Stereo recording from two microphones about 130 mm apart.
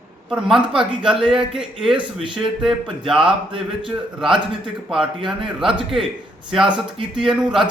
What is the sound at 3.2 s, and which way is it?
Speech, 40° right (ahead or behind).